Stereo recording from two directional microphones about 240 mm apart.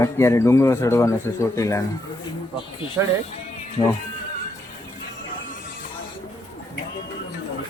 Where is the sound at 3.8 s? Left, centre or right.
Centre.